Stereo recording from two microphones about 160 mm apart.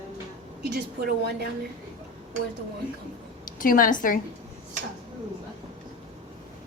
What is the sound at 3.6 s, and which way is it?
Speech, 60° left (ahead or behind).